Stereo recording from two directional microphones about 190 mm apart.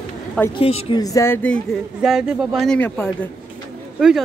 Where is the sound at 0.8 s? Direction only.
20° left (ahead or behind).